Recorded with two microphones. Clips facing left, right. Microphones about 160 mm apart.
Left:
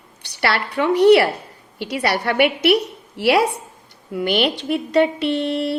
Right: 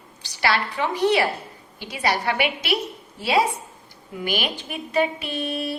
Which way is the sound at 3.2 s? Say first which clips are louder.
Left 5 dB; 75° left (ahead or behind).